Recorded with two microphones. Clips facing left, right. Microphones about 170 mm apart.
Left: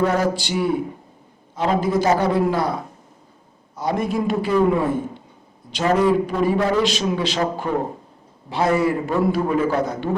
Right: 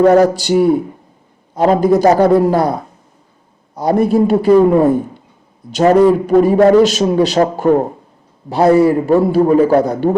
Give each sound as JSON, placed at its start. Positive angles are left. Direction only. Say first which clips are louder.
{"t": 0.0, "sound": "a man's voice", "louder": "right 10 dB", "side_deg": -40}
{"t": 3.8, "sound": "a man's voice", "louder": "right 10 dB", "side_deg": -40}